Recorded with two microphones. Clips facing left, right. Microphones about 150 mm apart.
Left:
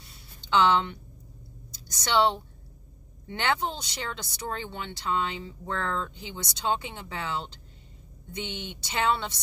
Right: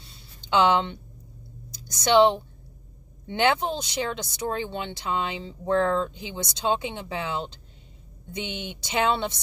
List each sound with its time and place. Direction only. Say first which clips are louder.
0.5 s speech: right 2 dB; 15° right (ahead or behind)